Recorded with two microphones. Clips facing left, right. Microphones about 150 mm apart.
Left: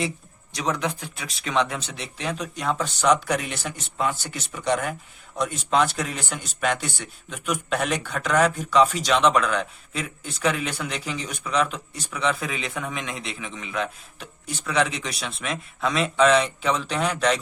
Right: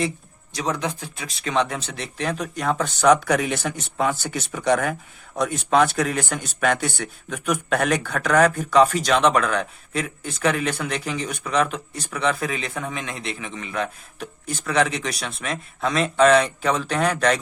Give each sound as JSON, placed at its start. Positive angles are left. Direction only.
{"t": 0.5, "sound": "speech", "side_deg": -30}
{"t": 2.2, "sound": "speech", "side_deg": -50}